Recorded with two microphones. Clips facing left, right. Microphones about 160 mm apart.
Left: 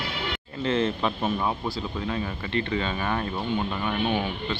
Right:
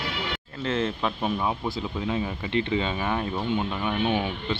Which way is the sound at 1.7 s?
20° right (ahead or behind).